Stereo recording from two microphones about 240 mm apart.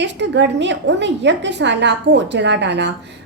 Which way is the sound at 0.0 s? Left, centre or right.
Right.